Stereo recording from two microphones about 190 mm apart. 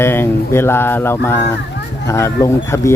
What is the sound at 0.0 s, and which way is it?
Speech, 10° left (ahead or behind).